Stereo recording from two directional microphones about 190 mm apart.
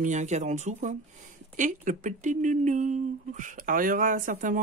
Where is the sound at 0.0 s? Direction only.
40° right (ahead or behind).